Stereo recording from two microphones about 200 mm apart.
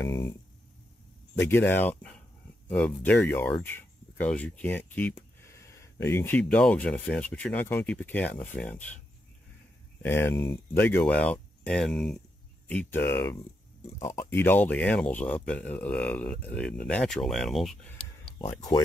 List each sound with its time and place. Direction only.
1.4 s speech: 10° left (ahead or behind)
10.3 s speech: 25° left (ahead or behind)
10.7 s speech: 10° left (ahead or behind)